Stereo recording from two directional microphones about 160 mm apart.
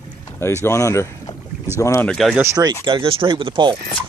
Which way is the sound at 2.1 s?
Centre (ahead or behind).